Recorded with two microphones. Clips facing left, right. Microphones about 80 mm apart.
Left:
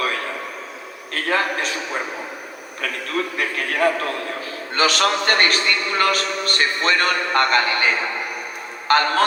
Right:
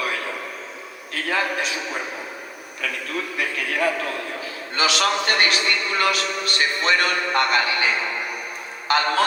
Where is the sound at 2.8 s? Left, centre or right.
Left.